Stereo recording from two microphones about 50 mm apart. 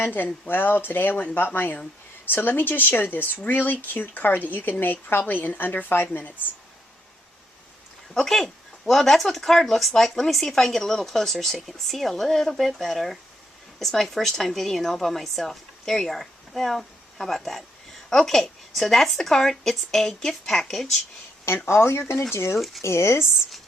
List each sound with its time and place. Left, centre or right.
0.0 s speech: left
8.1 s speech: centre
21.7 s speech: left
22.5 s speech: centre
22.8 s speech: left